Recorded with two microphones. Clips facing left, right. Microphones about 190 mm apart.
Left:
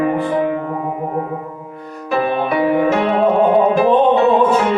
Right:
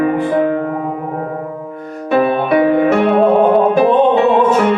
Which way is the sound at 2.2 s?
45° right (ahead or behind).